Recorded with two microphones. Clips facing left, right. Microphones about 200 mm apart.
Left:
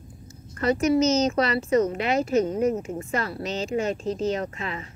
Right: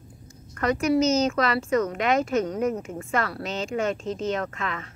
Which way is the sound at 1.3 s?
35° left (ahead or behind).